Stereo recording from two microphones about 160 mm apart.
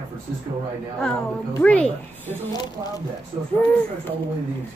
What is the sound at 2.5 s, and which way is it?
Speech, 25° left (ahead or behind).